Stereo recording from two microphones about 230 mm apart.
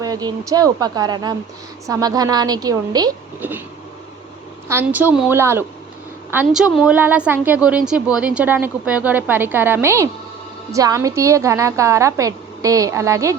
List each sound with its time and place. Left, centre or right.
0.0 s a woman's voice: centre
4.7 s a woman's voice: centre